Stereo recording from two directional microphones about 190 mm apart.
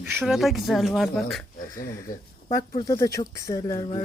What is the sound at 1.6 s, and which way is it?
Speech, 15° left (ahead or behind).